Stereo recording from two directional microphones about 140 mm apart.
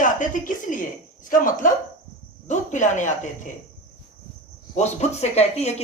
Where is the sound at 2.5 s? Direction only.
60° left (ahead or behind).